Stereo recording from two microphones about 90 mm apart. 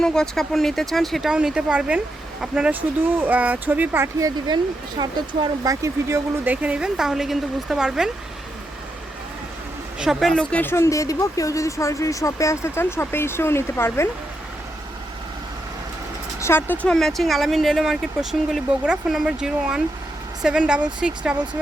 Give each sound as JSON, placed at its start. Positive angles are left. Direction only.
{"t": 0.0, "sound": "speech", "side_deg": 5}
{"t": 4.2, "sound": "speech", "side_deg": -50}
{"t": 5.8, "sound": "speech", "side_deg": -35}
{"t": 6.4, "sound": "speech", "side_deg": -15}
{"t": 10.0, "sound": "speech", "side_deg": 0}
{"t": 10.5, "sound": "speech", "side_deg": 25}
{"t": 16.4, "sound": "speech", "side_deg": 25}
{"t": 16.8, "sound": "speech", "side_deg": 5}